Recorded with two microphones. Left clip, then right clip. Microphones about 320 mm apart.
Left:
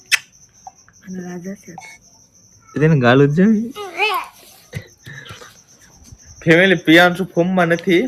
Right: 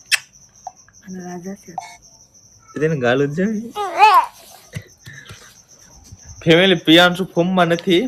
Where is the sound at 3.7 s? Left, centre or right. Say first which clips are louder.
Right 8 dB; centre.